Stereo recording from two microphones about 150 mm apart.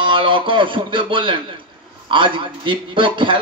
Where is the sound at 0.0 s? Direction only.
35° right (ahead or behind).